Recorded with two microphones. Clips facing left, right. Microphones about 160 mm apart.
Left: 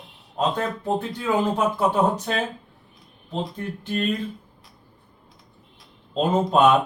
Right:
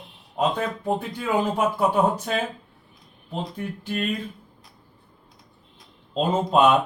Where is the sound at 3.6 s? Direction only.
10° right (ahead or behind).